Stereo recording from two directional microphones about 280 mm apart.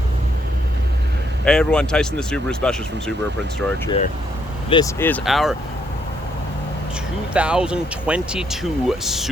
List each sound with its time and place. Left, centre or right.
1.5 s speech: centre
3.8 s speech: left
4.7 s speech: centre
7.3 s speech: centre